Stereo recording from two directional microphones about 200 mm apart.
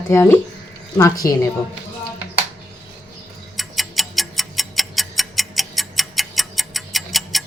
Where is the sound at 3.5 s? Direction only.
Centre (ahead or behind).